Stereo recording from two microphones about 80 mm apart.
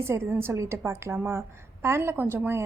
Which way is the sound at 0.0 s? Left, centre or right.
Right.